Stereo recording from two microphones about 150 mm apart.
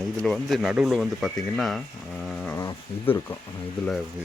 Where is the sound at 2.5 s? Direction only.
20° left (ahead or behind).